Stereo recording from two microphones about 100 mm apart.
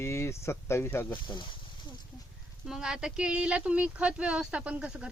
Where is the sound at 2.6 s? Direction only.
5° right (ahead or behind).